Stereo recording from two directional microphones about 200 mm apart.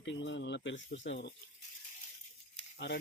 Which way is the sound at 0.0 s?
65° left (ahead or behind).